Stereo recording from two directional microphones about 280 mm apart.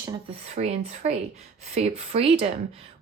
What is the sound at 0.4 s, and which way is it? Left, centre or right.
A woman's voice, right.